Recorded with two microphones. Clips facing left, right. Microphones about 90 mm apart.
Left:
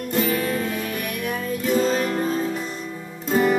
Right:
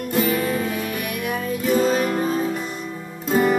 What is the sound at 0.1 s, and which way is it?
Music, 5° right (ahead or behind).